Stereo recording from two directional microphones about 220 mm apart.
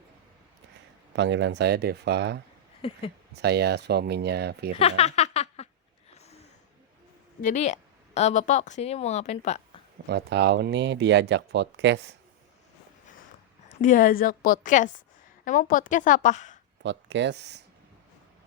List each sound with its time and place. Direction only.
1.1 s speech: 55° right (ahead or behind)
2.8 s speech: 25° left (ahead or behind)
3.3 s speech: 50° right (ahead or behind)
4.8 s a sound: 30° left (ahead or behind)
7.4 s a woman's voice: 30° left (ahead or behind)
10.1 s speech: 50° right (ahead or behind)
13.7 s a woman's voice: 35° left (ahead or behind)
16.8 s speech: 55° right (ahead or behind)